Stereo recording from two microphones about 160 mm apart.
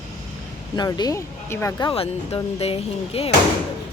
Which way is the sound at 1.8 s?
35° left (ahead or behind).